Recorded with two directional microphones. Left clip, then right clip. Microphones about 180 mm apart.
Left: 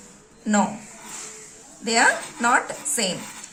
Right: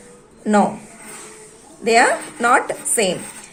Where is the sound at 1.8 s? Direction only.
30° right (ahead or behind).